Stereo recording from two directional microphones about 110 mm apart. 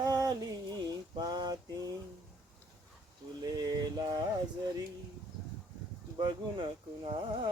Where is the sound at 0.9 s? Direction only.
35° right (ahead or behind).